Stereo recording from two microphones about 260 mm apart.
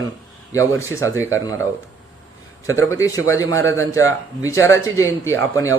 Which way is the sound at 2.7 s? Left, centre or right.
Centre.